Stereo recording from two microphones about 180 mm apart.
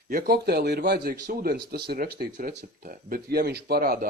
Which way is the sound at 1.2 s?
50° right (ahead or behind).